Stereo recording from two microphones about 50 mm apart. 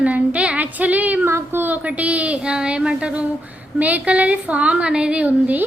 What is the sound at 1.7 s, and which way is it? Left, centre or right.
A woman's voice, right.